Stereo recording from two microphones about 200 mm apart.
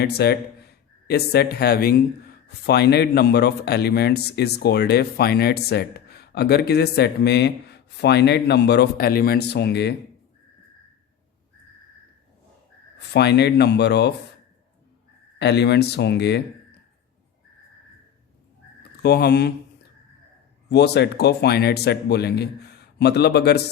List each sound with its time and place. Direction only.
0.0 s a man's voice: 50° left (ahead or behind)
13.0 s speech: 55° left (ahead or behind)
15.4 s speech: 55° left (ahead or behind)
19.0 s a man's voice: 50° left (ahead or behind)
20.7 s speech: 55° left (ahead or behind)